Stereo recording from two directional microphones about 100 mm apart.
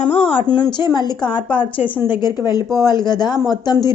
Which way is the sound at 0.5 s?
45° left (ahead or behind).